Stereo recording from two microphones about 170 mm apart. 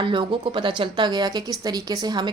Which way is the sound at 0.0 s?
30° right (ahead or behind).